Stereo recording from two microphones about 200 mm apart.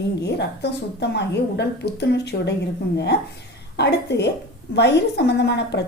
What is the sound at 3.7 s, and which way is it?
A woman's voice, 55° left (ahead or behind).